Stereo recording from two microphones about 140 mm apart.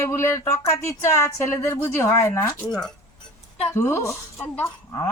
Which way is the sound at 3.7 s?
20° left (ahead or behind).